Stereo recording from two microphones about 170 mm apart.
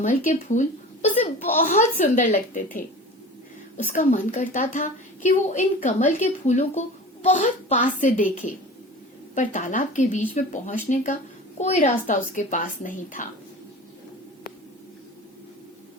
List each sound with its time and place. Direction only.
0.0 s a woman's voice: 45° left (ahead or behind)
3.8 s a woman's voice: 50° left (ahead or behind)
9.3 s a woman's voice: 50° left (ahead or behind)